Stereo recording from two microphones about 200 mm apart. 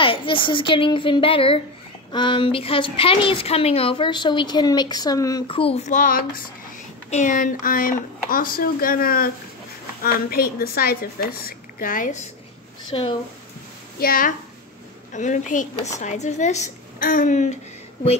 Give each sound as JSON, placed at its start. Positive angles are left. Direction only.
{"t": 0.0, "sound": "a woman's voice", "side_deg": 25}
{"t": 10.3, "sound": "speech", "side_deg": 50}
{"t": 12.9, "sound": "a woman's voice", "side_deg": 25}
{"t": 13.9, "sound": "a woman's voice", "side_deg": 45}